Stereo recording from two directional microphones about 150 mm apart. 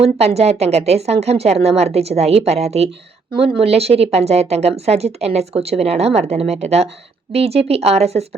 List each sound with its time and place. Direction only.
0.0 s speech: 45° right (ahead or behind)